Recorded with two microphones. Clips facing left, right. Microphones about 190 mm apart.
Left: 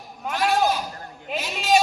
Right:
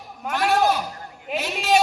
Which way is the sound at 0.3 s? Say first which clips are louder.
Right 1 dB; 60° right (ahead or behind).